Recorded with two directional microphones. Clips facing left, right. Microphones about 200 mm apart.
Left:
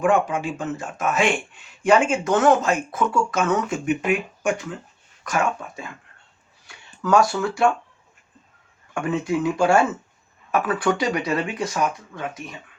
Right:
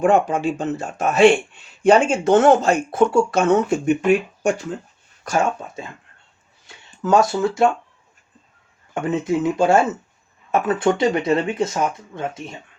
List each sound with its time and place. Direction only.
0.0 s speech: 35° right (ahead or behind)
5.2 s speech: 30° right (ahead or behind)
9.0 s speech: 20° right (ahead or behind)